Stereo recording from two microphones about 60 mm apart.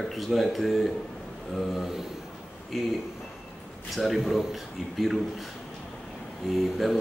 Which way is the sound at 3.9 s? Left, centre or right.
Centre.